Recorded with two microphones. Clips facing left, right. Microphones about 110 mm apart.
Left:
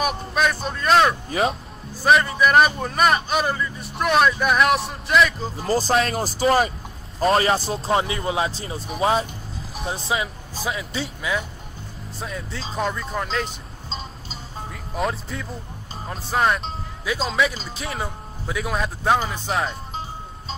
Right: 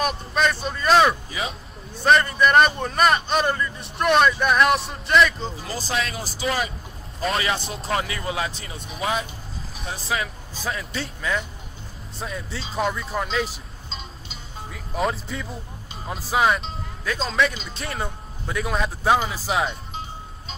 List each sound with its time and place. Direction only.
0.0 s speech: centre (ahead or behind)
5.6 s a man's voice: 35° left (ahead or behind)
10.1 s speech: 20° left (ahead or behind)
10.6 s speech: centre (ahead or behind)
13.8 s music: 35° left (ahead or behind)
14.7 s music: centre (ahead or behind)
16.1 s speech: centre (ahead or behind)